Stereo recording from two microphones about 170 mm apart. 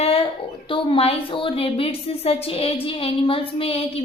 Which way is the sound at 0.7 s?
30° left (ahead or behind).